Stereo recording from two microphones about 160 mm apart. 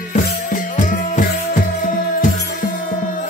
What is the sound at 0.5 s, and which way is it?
Music, 55° left (ahead or behind).